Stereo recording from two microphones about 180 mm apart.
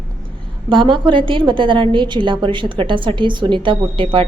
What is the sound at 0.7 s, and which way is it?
A woman's voice, 25° right (ahead or behind).